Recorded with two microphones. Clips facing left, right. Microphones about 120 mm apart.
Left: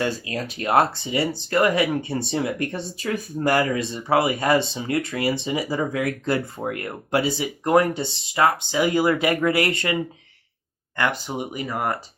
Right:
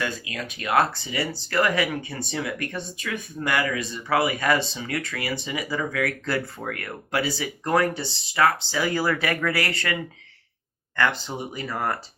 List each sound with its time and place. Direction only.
0.0 s speech: 30° left (ahead or behind); by 11.9 s 15° left (ahead or behind)